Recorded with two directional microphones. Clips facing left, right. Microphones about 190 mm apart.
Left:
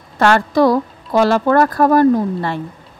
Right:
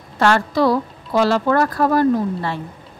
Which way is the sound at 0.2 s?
50° left (ahead or behind).